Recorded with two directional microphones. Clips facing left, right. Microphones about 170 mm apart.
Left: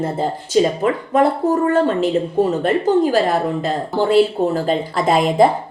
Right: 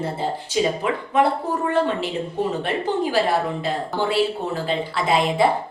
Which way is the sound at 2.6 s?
45° left (ahead or behind).